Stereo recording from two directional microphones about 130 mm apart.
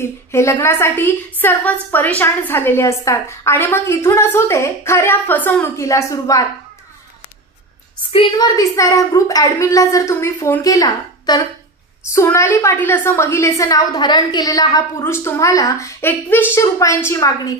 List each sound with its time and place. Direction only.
0.3 s a woman's voice: 20° left (ahead or behind)
8.4 s a woman's voice: 25° left (ahead or behind)